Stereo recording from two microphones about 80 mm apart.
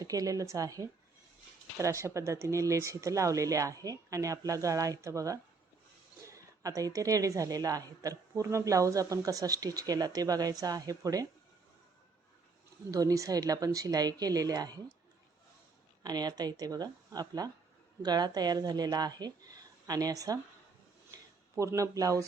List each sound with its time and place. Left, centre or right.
0.0 s a woman's voice: right
12.9 s a woman's voice: right
16.0 s speech: right
21.5 s a woman's voice: right